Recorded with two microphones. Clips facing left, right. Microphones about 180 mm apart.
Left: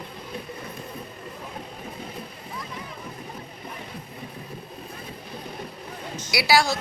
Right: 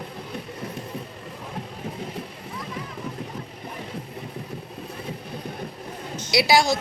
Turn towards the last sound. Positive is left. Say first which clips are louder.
# right 2 dB
turn(degrees=-20)  # may be behind; listen again after turning